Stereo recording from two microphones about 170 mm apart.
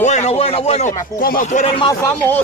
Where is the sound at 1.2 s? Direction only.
55° left (ahead or behind).